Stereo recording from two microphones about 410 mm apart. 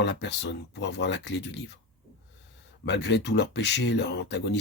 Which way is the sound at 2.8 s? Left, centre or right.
Left.